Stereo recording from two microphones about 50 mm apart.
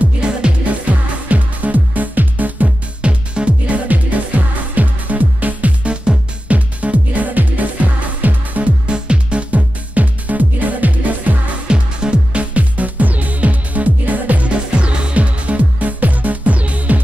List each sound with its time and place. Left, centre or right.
0.2 s music: right
8.8 s music: centre
11.6 s music: centre